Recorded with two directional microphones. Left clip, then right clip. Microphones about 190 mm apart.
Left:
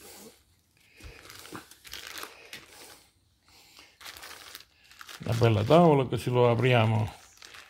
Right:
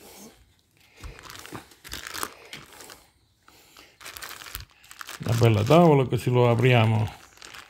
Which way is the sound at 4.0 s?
35° right (ahead or behind).